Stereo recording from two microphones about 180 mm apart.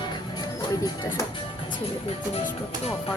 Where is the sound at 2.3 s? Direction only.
35° left (ahead or behind).